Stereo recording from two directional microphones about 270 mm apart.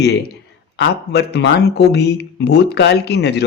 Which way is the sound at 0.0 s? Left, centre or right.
Left.